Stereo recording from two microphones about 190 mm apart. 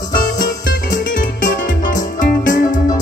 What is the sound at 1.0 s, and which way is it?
Music, 45° left (ahead or behind).